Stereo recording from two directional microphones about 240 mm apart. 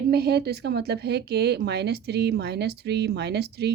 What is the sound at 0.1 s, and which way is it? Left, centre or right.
Speech, right.